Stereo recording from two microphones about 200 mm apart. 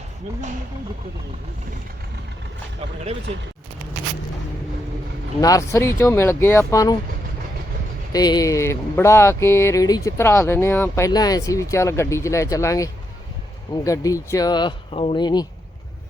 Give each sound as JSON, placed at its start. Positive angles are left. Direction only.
{"t": 5.4, "sound": "speech", "side_deg": 15}
{"t": 8.1, "sound": "speech", "side_deg": 20}